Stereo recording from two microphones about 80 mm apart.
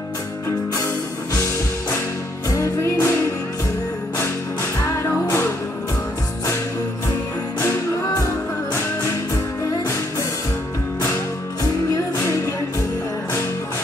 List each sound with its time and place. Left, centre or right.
2.5 s music: left